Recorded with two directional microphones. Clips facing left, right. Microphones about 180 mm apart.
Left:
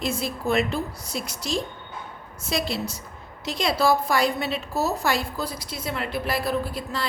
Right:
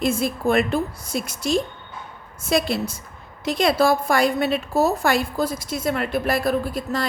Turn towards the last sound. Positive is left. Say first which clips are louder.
# right 4 dB
turn(degrees=-45)  # may be behind; listen again after turning